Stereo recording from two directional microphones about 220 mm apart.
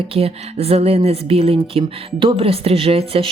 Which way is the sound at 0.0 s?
25° right (ahead or behind).